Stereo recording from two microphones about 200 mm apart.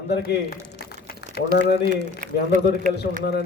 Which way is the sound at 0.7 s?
55° left (ahead or behind).